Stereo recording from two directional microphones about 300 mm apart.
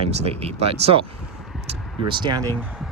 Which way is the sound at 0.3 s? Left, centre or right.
Centre.